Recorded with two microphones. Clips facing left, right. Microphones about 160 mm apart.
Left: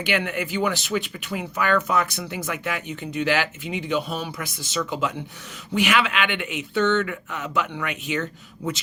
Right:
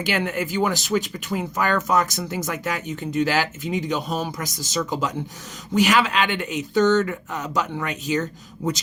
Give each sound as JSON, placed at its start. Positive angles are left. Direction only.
{"t": 0.0, "sound": "speech", "side_deg": -40}